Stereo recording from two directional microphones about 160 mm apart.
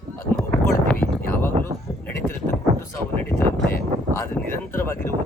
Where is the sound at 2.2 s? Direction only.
Centre (ahead or behind).